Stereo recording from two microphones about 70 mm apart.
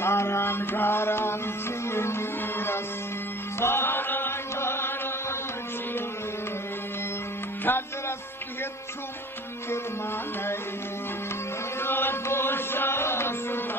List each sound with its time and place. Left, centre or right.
0.0 s music: left
7.7 s music: left
11.8 s chant: left